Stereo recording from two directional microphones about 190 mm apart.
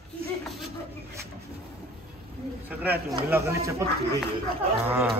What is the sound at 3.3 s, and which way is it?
Speech, 15° right (ahead or behind).